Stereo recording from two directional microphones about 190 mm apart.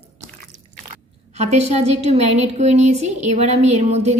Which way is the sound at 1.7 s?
35° right (ahead or behind).